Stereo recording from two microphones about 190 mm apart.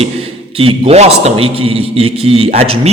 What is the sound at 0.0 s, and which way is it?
A man's voice, 30° right (ahead or behind).